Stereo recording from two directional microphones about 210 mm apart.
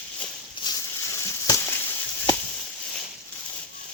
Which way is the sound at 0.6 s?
15° left (ahead or behind).